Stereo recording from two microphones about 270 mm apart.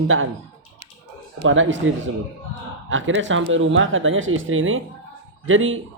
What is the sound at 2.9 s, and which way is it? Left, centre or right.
Speech, right.